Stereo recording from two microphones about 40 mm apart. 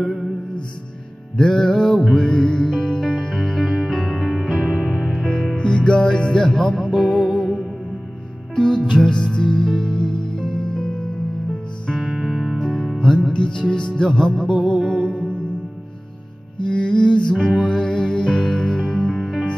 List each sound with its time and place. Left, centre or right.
0.0 s music: centre
1.3 s music: centre
3.0 s music: centre
5.6 s music: centre
6.5 s music: centre
6.9 s music: centre
8.5 s music: centre
12.1 s music: centre
12.8 s music: centre
13.3 s music: left
16.6 s music: centre
19.1 s music: centre